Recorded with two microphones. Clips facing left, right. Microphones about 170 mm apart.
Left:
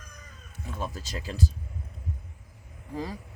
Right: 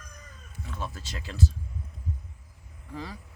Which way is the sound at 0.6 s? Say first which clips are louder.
Left 2 dB; 45° left (ahead or behind).